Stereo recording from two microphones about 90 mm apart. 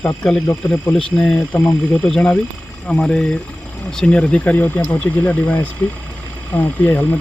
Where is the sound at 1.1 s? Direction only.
10° left (ahead or behind).